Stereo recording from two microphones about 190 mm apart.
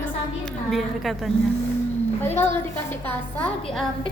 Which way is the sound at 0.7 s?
Centre (ahead or behind).